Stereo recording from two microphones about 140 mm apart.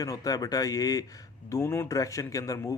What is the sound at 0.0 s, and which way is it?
Speech, 25° left (ahead or behind).